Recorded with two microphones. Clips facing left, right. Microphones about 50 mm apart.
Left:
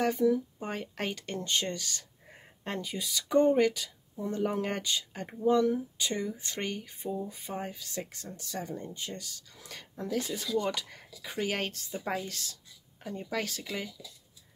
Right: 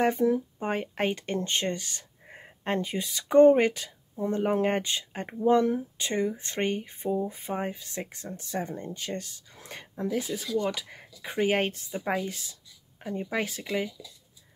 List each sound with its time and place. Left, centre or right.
0.0 s speech: right
10.2 s speech: centre
11.2 s speech: right